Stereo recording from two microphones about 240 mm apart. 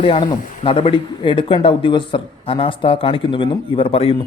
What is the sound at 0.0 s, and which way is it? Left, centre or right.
A man's voice, left.